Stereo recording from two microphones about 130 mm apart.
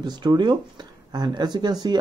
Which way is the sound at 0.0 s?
35° right (ahead or behind).